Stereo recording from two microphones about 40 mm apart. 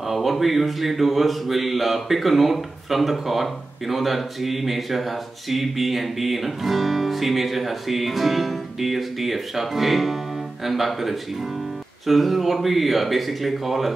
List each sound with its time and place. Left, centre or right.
0.1 s mantra: centre